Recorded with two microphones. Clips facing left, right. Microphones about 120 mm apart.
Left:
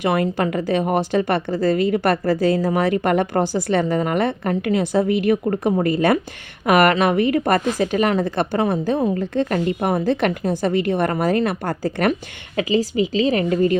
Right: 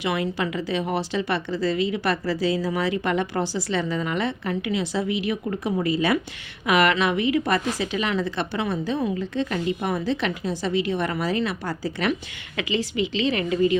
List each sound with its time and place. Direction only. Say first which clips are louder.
0.0 s a woman's voice: left 6 dB; 50° left (ahead or behind)
12.5 s a woman's voice: left 6 dB; 40° left (ahead or behind)